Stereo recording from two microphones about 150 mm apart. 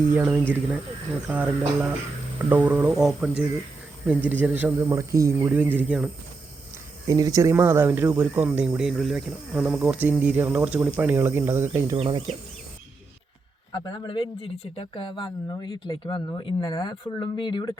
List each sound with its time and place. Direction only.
0.1 s speech: 10° right (ahead or behind)
7.1 s speech: 20° right (ahead or behind)
11.9 s speech: 30° right (ahead or behind)
13.7 s speech: 25° left (ahead or behind)